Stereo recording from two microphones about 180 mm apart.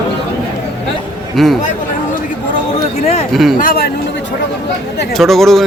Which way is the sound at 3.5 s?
55° left (ahead or behind).